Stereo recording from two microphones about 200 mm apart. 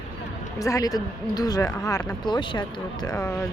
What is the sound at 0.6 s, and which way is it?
Speech, 15° left (ahead or behind).